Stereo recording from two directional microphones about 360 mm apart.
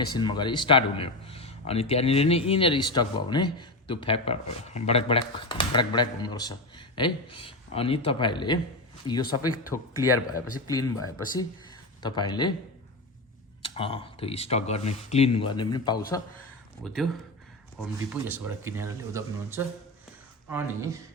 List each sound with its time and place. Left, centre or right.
0.1 s speech: centre
9.4 s speech: centre
10.0 s speech: centre
13.6 s speech: centre
18.1 s speech: centre